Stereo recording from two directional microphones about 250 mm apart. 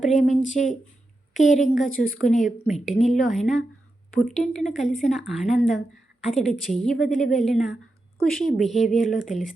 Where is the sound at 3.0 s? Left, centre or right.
Centre.